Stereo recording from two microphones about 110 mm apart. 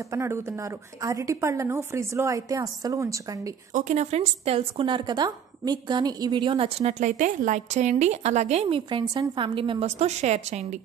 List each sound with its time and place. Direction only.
0.1 s a woman's voice: 25° right (ahead or behind)
3.8 s a woman's voice: 90° right; by 6.7 s 45° right (ahead or behind)
6.8 s speech: 90° right; by 9.1 s 50° right (ahead or behind)
9.1 s a woman's voice: 30° right (ahead or behind)
9.4 s a woman's voice: 50° right (ahead or behind); by 10.8 s 90° right